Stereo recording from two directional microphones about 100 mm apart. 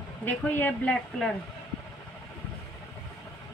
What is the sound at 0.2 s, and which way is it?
Speech, 20° left (ahead or behind).